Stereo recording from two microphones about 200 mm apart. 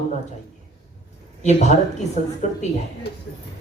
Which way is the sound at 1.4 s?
35° left (ahead or behind).